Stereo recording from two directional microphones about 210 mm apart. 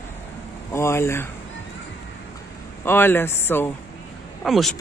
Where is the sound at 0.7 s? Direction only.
10° left (ahead or behind).